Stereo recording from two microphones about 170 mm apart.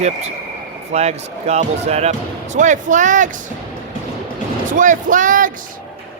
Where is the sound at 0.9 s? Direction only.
40° right (ahead or behind).